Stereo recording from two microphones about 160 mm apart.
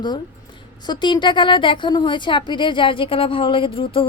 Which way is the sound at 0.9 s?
30° left (ahead or behind).